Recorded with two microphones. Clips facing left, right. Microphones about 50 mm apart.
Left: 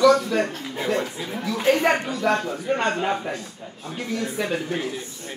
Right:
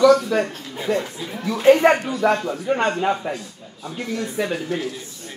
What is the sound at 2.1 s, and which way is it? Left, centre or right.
Speech, centre.